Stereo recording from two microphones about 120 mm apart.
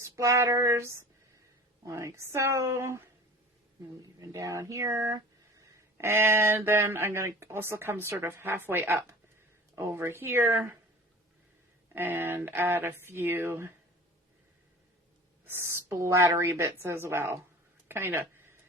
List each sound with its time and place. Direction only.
0.0 s speech: 25° right (ahead or behind)
4.0 s speech: 30° right (ahead or behind)
11.9 s speech: 15° right (ahead or behind)
15.4 s speech: 20° right (ahead or behind)
17.8 s a sound: 20° right (ahead or behind)